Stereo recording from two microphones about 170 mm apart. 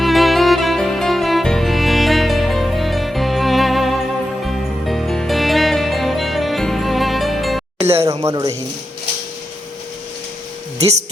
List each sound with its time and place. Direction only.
0.0 s music: centre (ahead or behind)
7.9 s a sound: 15° right (ahead or behind)
8.2 s speech: 20° right (ahead or behind)